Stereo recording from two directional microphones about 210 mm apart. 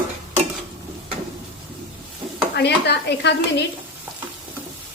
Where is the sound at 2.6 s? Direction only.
55° left (ahead or behind).